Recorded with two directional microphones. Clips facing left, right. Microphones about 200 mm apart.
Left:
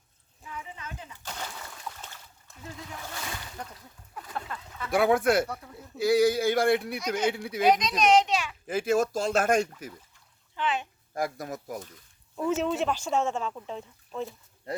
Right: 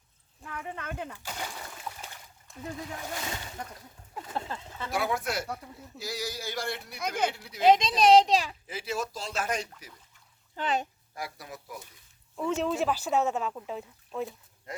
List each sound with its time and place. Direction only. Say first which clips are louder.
0.4 s a sound: right 3 dB; 60° right (ahead or behind)
1.2 s speech: right 1 dB; 10° right (ahead or behind)
4.1 s speech: right 2 dB; 25° right (ahead or behind)
4.9 s speech: left 8 dB; 55° left (ahead or behind)
7.6 s a child's voice: right 2 dB; 25° right (ahead or behind)
8.6 s speech: left 9 dB; 50° left (ahead or behind)
10.5 s speech: even; 40° right (ahead or behind)
11.1 s speech: left 11 dB; 45° left (ahead or behind)
12.4 s speech: left 1 dB; centre (ahead or behind)
14.7 s speech: left 6 dB; 35° left (ahead or behind)